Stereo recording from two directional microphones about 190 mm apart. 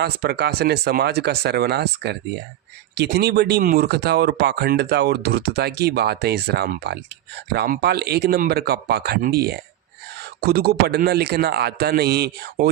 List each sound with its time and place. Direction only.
0.0 s speech: 60° right (ahead or behind)